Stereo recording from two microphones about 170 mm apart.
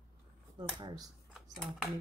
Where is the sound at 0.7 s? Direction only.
25° right (ahead or behind).